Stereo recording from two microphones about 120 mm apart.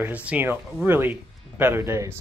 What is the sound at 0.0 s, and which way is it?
Speech, 15° right (ahead or behind).